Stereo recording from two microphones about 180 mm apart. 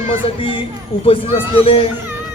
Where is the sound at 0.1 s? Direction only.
30° left (ahead or behind).